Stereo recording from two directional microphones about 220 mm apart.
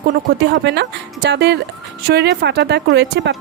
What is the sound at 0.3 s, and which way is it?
Speech, 50° right (ahead or behind).